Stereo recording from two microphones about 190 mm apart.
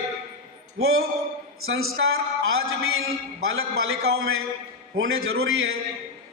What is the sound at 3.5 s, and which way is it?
Speech, 90° right.